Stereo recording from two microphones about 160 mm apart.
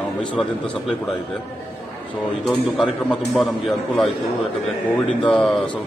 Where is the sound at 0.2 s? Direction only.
5° left (ahead or behind).